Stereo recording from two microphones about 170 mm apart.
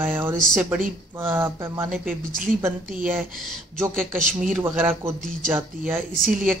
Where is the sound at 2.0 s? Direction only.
50° right (ahead or behind).